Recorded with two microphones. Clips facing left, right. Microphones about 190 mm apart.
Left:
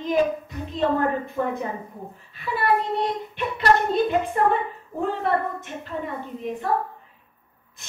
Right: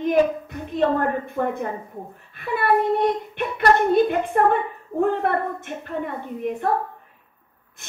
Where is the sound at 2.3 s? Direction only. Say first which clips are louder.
Right 2 dB; 55° right (ahead or behind).